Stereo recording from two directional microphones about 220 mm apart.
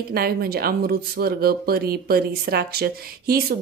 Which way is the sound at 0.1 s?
45° right (ahead or behind).